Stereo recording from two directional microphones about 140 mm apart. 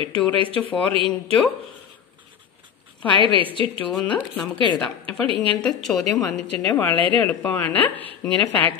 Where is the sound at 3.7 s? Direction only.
10° left (ahead or behind).